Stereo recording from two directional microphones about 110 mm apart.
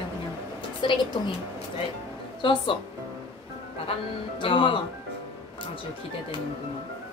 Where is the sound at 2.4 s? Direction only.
45° left (ahead or behind).